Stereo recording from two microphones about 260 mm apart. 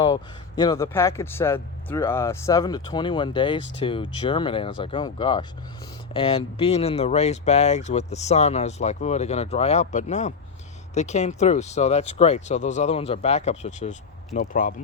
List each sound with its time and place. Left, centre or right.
0.0 s speech: centre; by 14.8 s left